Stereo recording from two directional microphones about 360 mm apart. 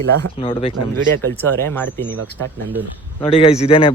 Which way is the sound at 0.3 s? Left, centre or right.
Centre.